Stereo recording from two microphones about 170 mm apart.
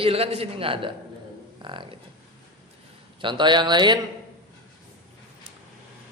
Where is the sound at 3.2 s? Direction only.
30° right (ahead or behind).